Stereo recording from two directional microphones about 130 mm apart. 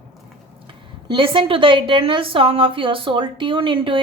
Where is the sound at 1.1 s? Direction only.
40° right (ahead or behind).